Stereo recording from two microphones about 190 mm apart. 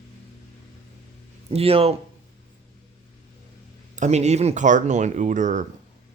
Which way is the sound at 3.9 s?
40° right (ahead or behind).